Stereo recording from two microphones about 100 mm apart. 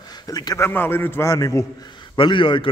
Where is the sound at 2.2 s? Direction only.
55° left (ahead or behind).